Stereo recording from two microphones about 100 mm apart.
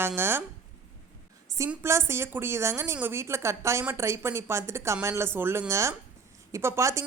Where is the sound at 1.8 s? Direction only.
25° right (ahead or behind).